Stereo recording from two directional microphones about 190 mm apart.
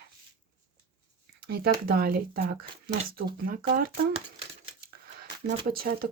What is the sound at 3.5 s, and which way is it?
Speech, 50° right (ahead or behind).